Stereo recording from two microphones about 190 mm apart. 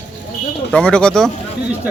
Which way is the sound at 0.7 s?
5° left (ahead or behind).